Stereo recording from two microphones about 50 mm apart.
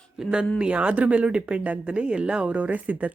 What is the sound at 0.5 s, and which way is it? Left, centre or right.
Speech, right.